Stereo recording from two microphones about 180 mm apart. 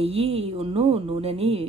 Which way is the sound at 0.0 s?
35° right (ahead or behind).